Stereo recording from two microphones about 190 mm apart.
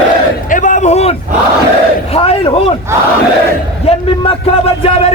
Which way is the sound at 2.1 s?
30° left (ahead or behind).